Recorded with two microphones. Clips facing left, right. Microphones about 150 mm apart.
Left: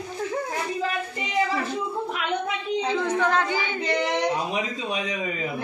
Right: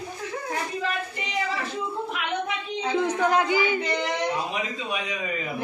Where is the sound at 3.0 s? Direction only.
10° right (ahead or behind).